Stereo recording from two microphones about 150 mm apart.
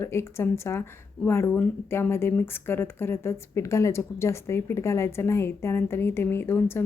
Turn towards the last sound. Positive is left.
turn(degrees=15)  # may be behind; listen again after turning